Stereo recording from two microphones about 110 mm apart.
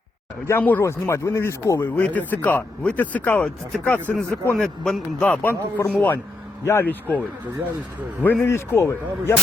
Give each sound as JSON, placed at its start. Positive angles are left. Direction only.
{"t": 0.4, "sound": "speech", "side_deg": 20}
{"t": 2.0, "sound": "speech", "side_deg": 15}
{"t": 4.5, "sound": "speech", "side_deg": 5}
{"t": 8.4, "sound": "speech", "side_deg": 25}